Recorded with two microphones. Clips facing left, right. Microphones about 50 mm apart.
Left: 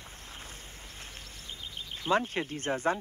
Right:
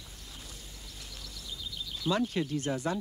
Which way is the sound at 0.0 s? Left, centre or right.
Left.